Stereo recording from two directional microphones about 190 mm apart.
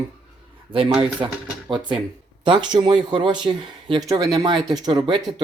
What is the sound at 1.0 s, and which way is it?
Speech, 25° right (ahead or behind).